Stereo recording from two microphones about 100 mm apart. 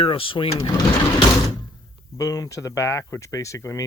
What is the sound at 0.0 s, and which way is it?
Speech, 60° left (ahead or behind).